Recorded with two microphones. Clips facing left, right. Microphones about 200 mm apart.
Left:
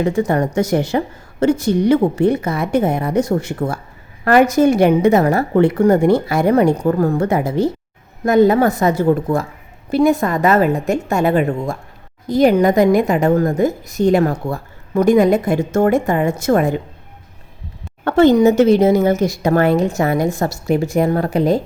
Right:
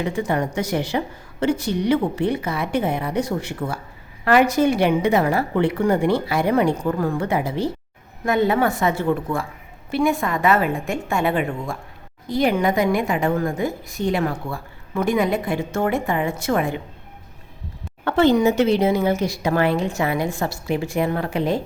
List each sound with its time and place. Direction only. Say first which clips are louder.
0.0 s a woman's voice: left 6 dB; 45° left (ahead or behind)
18.0 s a woman's voice: left 5 dB; 45° left (ahead or behind)